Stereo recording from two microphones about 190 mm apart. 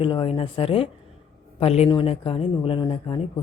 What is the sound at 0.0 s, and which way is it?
Speech, 25° left (ahead or behind).